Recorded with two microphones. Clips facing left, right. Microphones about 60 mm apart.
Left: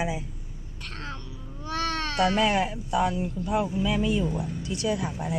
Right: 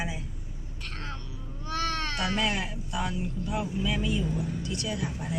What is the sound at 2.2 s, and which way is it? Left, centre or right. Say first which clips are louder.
Speech: left 8 dB; left.